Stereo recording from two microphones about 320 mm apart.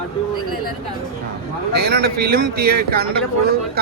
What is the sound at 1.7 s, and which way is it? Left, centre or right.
Speech, right.